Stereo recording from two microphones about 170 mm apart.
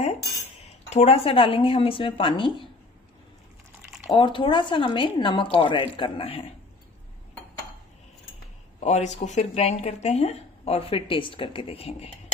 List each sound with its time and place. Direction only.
0.8 s speech: 40° left (ahead or behind)
4.1 s a woman's voice: 30° left (ahead or behind)
8.7 s speech: 40° left (ahead or behind)